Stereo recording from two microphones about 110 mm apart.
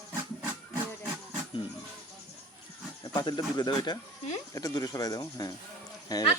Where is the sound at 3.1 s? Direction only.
40° left (ahead or behind).